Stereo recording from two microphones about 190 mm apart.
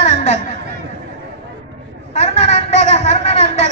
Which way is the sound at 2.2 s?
35° left (ahead or behind).